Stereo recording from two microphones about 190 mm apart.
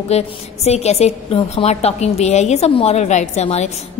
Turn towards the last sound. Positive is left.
turn(degrees=35)  # may be behind; listen again after turning